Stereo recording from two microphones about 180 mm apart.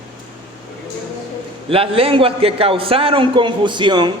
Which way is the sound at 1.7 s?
30° right (ahead or behind).